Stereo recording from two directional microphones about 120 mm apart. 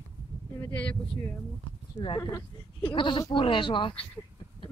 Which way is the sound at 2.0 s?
45° left (ahead or behind).